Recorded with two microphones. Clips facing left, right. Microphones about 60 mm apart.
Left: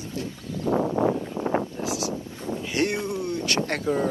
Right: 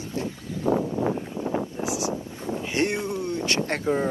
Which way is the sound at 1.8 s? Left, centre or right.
Right.